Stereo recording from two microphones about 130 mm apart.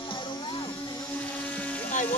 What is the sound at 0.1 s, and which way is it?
Music, 40° left (ahead or behind).